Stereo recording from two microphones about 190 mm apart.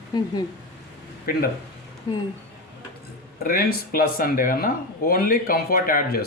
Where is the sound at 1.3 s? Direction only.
50° left (ahead or behind).